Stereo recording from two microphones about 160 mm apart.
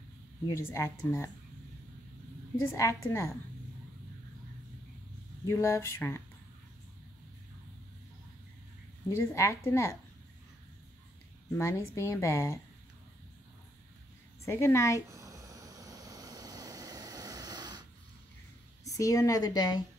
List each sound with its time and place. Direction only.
0.7 s a woman's voice: 15° left (ahead or behind)
2.6 s a woman's voice: 20° left (ahead or behind)
5.5 s a woman's voice: 15° left (ahead or behind)
9.1 s a woman's voice: 15° left (ahead or behind)
11.5 s a woman's voice: 15° left (ahead or behind)
14.4 s a woman's voice: 15° left (ahead or behind)
15.0 s a sound: 20° right (ahead or behind)
18.9 s a woman's voice: 20° left (ahead or behind)